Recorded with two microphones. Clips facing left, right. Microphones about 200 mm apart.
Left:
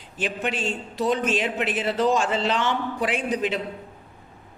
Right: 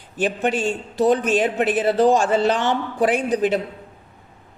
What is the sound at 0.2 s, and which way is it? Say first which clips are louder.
A woman's voice: right 6 dB; 45° right (ahead or behind).